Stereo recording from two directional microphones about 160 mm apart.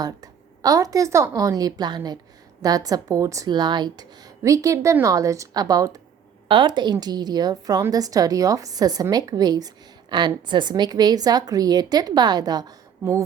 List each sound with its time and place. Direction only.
0.0 s a woman's voice: 25° right (ahead or behind)